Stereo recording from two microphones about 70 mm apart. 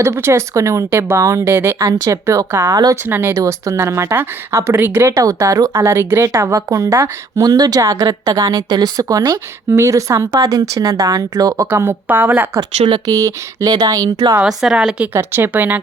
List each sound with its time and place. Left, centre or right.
0.0 s speech: right
0.9 s speech: right
1.2 s speech: right
3.1 s speech: right
3.3 s speech: right
5.2 s speech: right
7.3 s speech: right
9.7 s speech: right
10.6 s speech: right
11.7 s speech: right
12.5 s speech: right
13.7 s speech: right
14.4 s a woman's voice: centre
15.1 s speech: right